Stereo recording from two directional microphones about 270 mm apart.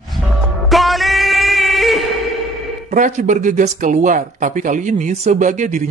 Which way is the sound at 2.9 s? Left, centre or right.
Right.